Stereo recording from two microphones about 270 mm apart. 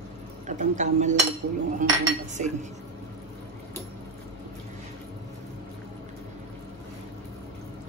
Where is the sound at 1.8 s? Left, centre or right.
Right.